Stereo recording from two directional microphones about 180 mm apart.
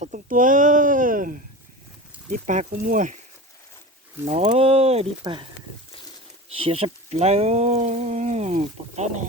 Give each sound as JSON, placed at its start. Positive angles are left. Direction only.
{"t": 0.0, "sound": "a sound", "side_deg": -45}
{"t": 2.5, "sound": "speech", "side_deg": -45}
{"t": 4.3, "sound": "speech", "side_deg": -35}
{"t": 6.5, "sound": "speech", "side_deg": -30}